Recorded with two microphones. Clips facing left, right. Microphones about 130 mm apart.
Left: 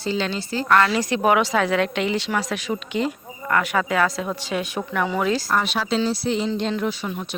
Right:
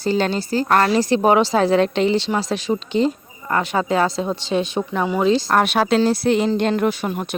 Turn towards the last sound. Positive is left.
turn(degrees=-50)  # may be behind; listen again after turning